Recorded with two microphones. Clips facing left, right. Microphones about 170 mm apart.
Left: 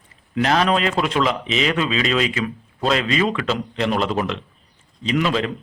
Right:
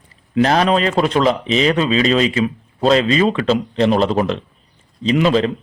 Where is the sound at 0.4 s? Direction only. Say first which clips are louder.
Right 3 dB; 35° right (ahead or behind).